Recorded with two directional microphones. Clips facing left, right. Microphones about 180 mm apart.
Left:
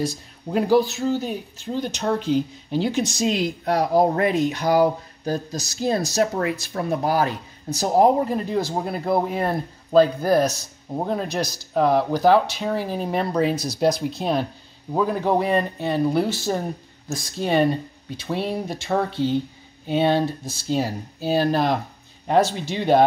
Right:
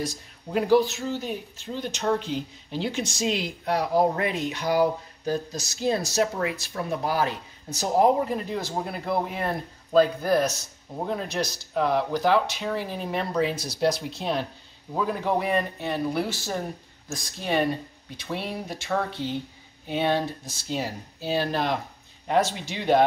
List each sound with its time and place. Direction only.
0.0 s speech: 30° left (ahead or behind)
15.2 s speech: 30° left (ahead or behind)